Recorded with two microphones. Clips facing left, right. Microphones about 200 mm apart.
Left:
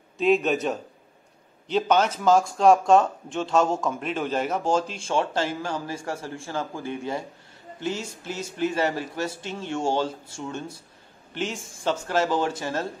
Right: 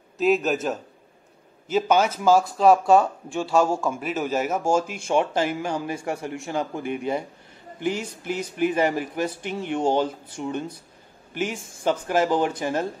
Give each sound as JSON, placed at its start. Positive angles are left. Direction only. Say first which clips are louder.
{"t": 0.2, "sound": "a man's voice", "louder": "even", "side_deg": -5}
{"t": 11.8, "sound": "speech", "louder": "right 2 dB", "side_deg": -10}